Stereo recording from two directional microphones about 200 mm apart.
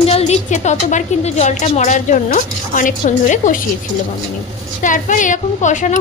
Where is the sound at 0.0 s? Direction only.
30° left (ahead or behind).